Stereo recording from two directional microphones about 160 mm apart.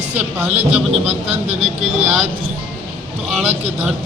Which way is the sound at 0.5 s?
40° right (ahead or behind).